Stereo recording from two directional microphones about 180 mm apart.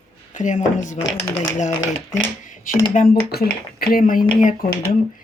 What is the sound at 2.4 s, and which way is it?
Speech, 45° left (ahead or behind).